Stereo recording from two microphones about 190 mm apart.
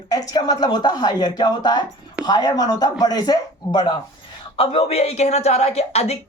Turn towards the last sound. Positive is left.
turn(degrees=35)  # may be behind; listen again after turning